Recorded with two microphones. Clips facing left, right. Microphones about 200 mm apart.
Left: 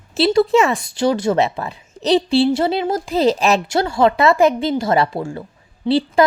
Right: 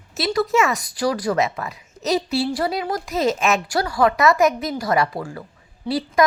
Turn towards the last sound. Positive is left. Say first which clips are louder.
# left 4 dB
turn(degrees=30)  # may be behind; listen again after turning